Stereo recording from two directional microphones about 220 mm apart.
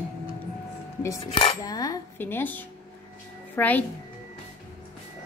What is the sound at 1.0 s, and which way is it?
Dishes, 15° left (ahead or behind).